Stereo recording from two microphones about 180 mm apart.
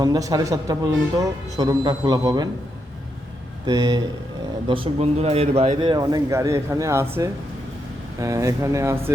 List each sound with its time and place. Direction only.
0.0 s a man's voice: 20° right (ahead or behind)
3.7 s a man's voice: 20° right (ahead or behind)
4.7 s a man's voice: 30° right (ahead or behind); by 9.1 s 15° right (ahead or behind)